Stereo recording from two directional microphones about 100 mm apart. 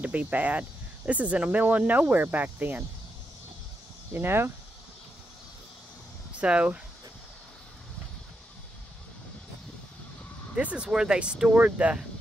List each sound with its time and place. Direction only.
0.0 s speech: 15° right (ahead or behind)
4.1 s speech: 25° right (ahead or behind)
6.4 s speech: 10° right (ahead or behind)
10.5 s speech: 10° right (ahead or behind)